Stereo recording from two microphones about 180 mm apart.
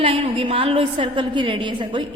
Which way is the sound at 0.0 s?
30° right (ahead or behind).